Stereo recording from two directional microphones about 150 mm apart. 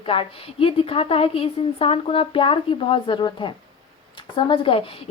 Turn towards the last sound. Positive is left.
turn(degrees=35)  # may be behind; listen again after turning